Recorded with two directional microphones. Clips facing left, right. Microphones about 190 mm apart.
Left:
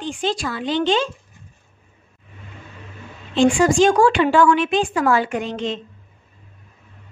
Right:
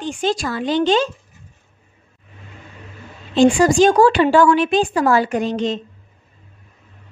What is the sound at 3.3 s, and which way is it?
A woman's voice, 40° right (ahead or behind).